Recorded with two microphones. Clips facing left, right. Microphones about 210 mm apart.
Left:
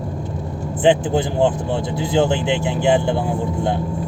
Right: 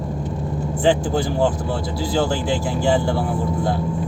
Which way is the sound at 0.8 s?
20° left (ahead or behind).